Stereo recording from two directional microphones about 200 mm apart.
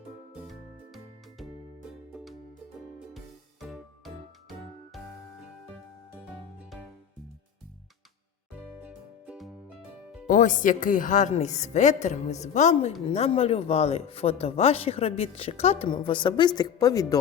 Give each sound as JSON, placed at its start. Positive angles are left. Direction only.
{"t": 3.2, "sound": "music", "side_deg": 0}
{"t": 8.8, "sound": "music", "side_deg": -5}
{"t": 10.2, "sound": "a woman's voice", "side_deg": 40}